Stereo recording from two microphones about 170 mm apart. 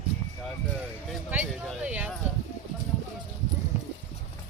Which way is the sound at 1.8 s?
10° right (ahead or behind).